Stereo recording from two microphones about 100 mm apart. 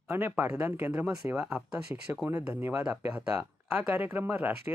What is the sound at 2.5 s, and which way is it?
Speech, 25° right (ahead or behind).